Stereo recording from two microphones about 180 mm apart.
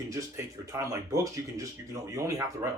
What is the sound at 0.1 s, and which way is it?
Speech, 15° right (ahead or behind).